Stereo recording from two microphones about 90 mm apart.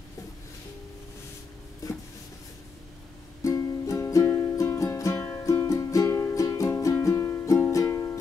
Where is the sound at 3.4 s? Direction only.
35° left (ahead or behind).